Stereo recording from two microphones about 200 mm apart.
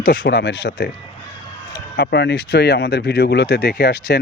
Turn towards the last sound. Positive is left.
turn(degrees=55)  # may be behind; listen again after turning